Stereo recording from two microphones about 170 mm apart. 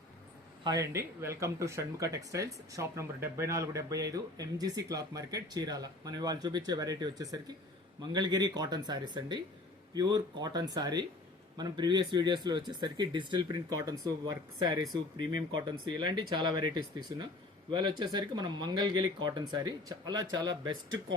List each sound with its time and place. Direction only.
0.6 s speech: 20° right (ahead or behind)